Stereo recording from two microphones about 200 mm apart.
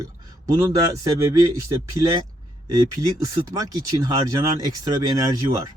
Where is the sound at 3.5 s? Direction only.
20° right (ahead or behind).